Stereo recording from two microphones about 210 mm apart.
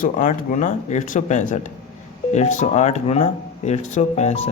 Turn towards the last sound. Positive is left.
turn(degrees=30)  # may be behind; listen again after turning